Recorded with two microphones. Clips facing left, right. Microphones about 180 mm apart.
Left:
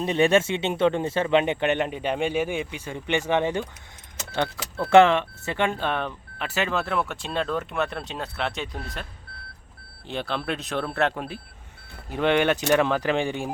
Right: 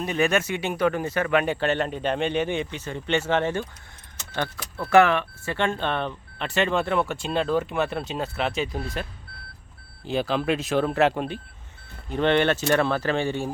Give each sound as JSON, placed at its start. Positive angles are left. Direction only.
{"t": 0.0, "sound": "speech", "side_deg": 30}
{"t": 4.8, "sound": "speech", "side_deg": 25}
{"t": 10.1, "sound": "speech", "side_deg": -5}
{"t": 12.0, "sound": "speech", "side_deg": 10}